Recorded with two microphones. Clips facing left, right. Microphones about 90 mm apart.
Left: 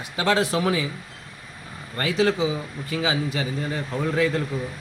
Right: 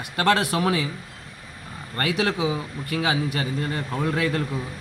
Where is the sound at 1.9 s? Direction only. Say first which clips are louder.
Left 2 dB; 55° right (ahead or behind).